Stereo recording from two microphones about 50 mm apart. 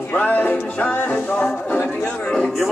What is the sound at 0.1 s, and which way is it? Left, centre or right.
Music, left.